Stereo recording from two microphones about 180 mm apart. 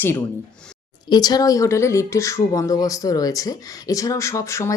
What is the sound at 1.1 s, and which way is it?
Speech, 20° left (ahead or behind).